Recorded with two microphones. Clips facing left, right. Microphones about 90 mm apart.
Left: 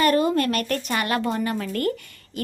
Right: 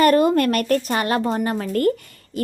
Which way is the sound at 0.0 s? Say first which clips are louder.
Right 4 dB; 50° right (ahead or behind).